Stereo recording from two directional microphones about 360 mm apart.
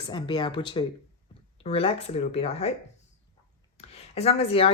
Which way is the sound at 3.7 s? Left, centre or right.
Centre.